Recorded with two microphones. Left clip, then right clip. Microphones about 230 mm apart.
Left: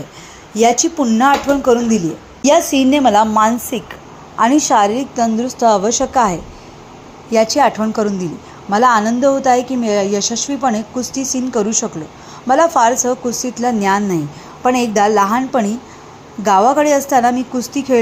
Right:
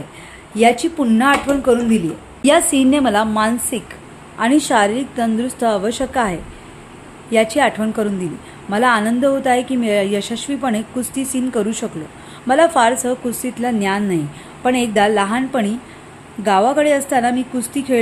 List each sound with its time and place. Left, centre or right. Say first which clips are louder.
0.5 s speech: left 1 dB; centre
7.5 s speech: left 3 dB; centre
10.2 s speech: left 4 dB; centre
10.6 s speech: left 5 dB; centre